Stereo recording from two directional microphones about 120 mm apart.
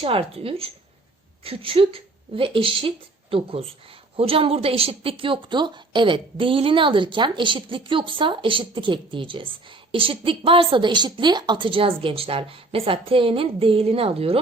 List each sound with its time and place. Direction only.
0.0 s a woman's voice: 50° right (ahead or behind)